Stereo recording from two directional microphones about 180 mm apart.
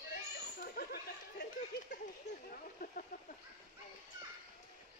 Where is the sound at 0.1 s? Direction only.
55° left (ahead or behind).